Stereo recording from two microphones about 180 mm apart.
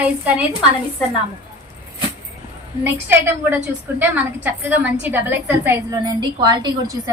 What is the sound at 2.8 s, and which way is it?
A woman's voice, 10° right (ahead or behind).